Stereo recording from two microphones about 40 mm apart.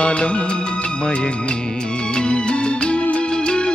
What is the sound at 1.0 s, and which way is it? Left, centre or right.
Speech, left.